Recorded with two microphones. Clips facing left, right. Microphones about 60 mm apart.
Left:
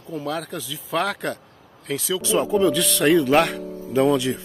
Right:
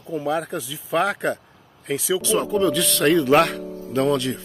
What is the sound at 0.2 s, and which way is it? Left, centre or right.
Speech, centre.